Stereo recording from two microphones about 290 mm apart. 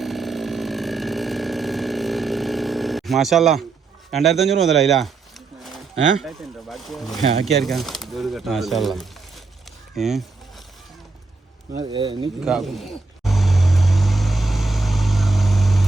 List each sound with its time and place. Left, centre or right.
0.0 s chainsaw: centre
4.1 s speech: centre
6.2 s speech: centre
11.8 s speech: centre
12.5 s vehicle: centre